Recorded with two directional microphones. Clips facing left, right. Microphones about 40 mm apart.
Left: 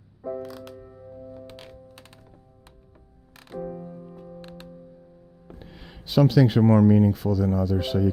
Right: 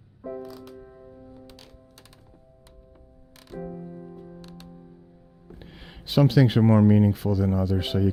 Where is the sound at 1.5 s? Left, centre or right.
Left.